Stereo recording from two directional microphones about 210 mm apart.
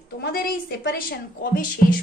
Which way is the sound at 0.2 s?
45° left (ahead or behind).